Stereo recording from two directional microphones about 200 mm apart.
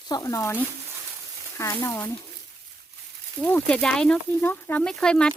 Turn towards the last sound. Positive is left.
turn(degrees=5)  # may be behind; listen again after turning